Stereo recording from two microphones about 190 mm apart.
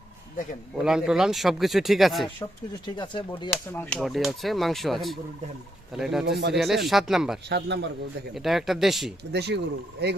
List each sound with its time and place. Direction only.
0.8 s speech: 5° right (ahead or behind)
2.8 s speech: 25° left (ahead or behind)
3.7 s speech: 10° left (ahead or behind)
4.0 s speech: centre (ahead or behind)
7.5 s a man's voice: 65° right (ahead or behind)
8.4 s speech: centre (ahead or behind)
9.3 s a man's voice: 65° right (ahead or behind)